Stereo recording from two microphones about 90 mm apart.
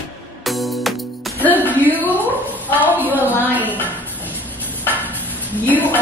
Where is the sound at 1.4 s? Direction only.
20° left (ahead or behind).